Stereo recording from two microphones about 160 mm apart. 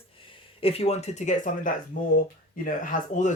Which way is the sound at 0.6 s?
40° left (ahead or behind).